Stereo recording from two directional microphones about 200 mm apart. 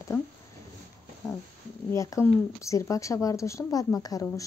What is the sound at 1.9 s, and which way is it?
Speech, 15° left (ahead or behind).